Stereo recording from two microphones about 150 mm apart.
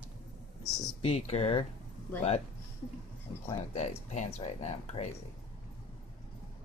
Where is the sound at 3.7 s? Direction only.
50° left (ahead or behind).